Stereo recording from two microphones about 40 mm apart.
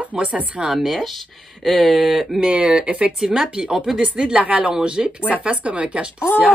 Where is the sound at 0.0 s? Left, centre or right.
Right.